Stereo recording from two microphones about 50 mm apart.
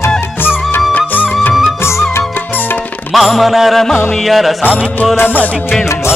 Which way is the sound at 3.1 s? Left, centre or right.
Centre.